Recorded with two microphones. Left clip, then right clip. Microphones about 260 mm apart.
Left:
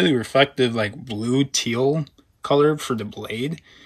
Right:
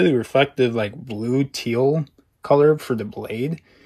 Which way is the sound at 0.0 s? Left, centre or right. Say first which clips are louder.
Even; centre.